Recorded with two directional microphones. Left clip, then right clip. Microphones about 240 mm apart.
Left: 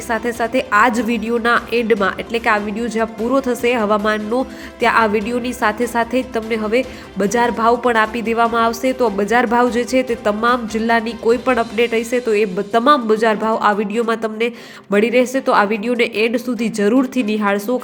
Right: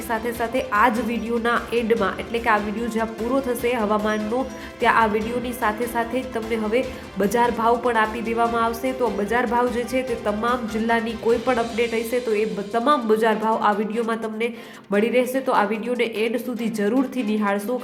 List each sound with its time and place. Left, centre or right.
0.1 s a woman's voice: centre